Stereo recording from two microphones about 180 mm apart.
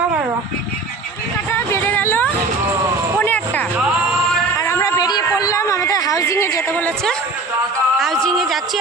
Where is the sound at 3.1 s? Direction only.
10° left (ahead or behind).